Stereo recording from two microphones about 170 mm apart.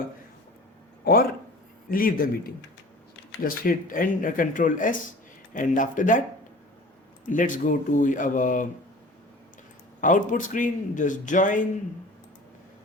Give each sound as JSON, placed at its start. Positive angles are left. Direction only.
{"t": 1.0, "sound": "speech", "side_deg": 70}
{"t": 1.9, "sound": "a man's voice", "side_deg": 55}
{"t": 7.3, "sound": "speech", "side_deg": 50}
{"t": 10.0, "sound": "speech", "side_deg": 50}